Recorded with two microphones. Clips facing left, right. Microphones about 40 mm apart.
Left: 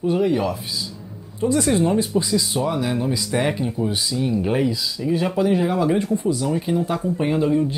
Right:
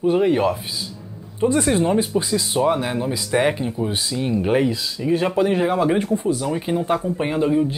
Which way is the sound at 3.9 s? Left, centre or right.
Right.